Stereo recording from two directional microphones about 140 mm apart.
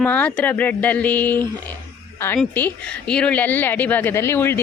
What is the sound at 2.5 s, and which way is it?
A woman's voice, 10° left (ahead or behind).